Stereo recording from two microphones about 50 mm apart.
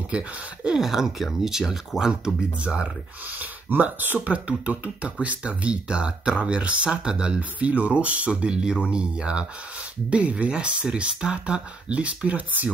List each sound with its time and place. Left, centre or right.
0.7 s speech: centre
3.3 s speech: right
4.3 s speech: right